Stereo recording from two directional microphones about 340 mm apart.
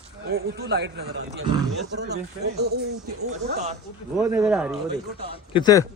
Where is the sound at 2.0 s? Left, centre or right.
Right.